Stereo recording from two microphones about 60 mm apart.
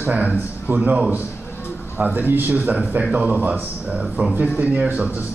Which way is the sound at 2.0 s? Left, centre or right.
Right.